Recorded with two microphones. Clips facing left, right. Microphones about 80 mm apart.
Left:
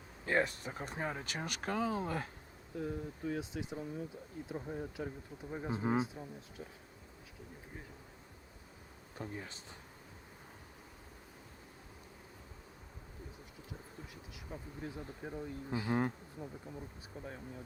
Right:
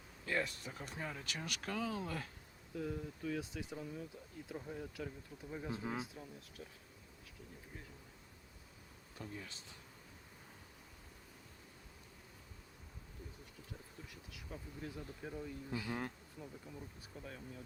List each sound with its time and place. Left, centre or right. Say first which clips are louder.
0.3 s speech: left 6 dB; left
2.7 s speech: left 2 dB; left
9.1 s speech: left 5 dB; left
14.3 s speech: left 3 dB; left